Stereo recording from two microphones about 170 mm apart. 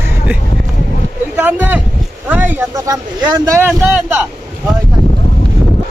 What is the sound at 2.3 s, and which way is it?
Speech, 10° right (ahead or behind).